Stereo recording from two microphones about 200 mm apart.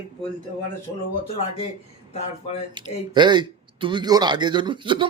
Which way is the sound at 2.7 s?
20° right (ahead or behind).